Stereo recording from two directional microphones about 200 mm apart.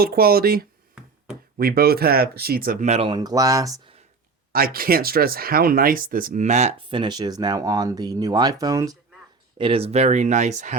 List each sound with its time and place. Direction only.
0.0 s speech: 50° right (ahead or behind)
2.9 s speech: 25° right (ahead or behind)
4.5 s speech: 50° right (ahead or behind)